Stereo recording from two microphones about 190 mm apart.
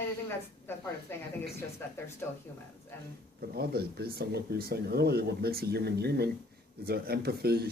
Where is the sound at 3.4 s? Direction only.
55° right (ahead or behind).